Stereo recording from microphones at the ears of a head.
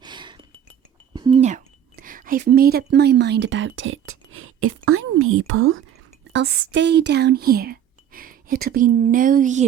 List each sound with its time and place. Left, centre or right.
1.3 s speech: right